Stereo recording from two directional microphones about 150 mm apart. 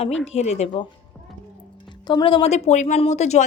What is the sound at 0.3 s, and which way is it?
Speech, 45° left (ahead or behind).